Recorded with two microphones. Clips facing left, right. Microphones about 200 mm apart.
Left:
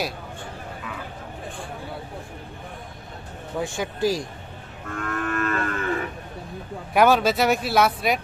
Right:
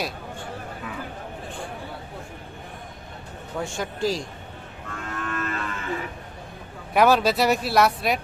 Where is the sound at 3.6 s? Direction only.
5° left (ahead or behind).